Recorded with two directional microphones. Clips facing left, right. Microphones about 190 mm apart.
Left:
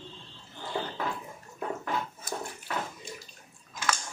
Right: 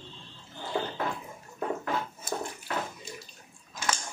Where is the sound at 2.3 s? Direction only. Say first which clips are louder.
Right 5 dB; 25° right (ahead or behind).